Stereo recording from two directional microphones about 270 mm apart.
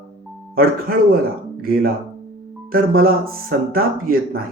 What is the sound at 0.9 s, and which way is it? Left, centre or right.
Speech, right.